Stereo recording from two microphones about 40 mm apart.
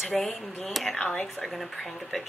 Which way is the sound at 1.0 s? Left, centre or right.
Centre.